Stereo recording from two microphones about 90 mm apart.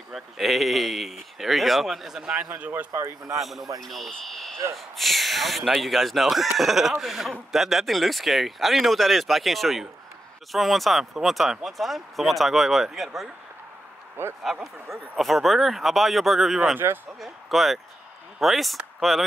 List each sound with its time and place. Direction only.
0.1 s speech: centre (ahead or behind); by 2.9 s 15° right (ahead or behind)
2.9 s speech: 35° right (ahead or behind)
3.3 s speech: centre (ahead or behind)
14.4 s speech: centre (ahead or behind)
16.7 s speech: 25° right (ahead or behind)
17.2 s speech: centre (ahead or behind)